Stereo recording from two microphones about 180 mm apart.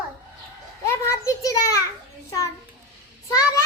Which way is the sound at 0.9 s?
15° left (ahead or behind).